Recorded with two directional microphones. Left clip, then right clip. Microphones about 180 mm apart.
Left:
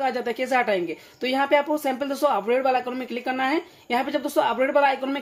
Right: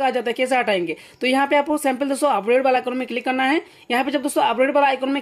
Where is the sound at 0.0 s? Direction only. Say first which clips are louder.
Right 5 dB; 30° right (ahead or behind).